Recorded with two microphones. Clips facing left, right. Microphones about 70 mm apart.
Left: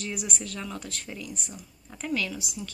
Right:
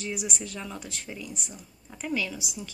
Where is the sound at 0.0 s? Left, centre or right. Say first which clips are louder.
Right 1 dB; centre.